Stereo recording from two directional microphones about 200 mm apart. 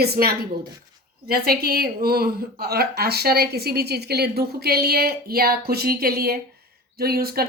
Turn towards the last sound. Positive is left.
turn(degrees=-50)  # may be behind; listen again after turning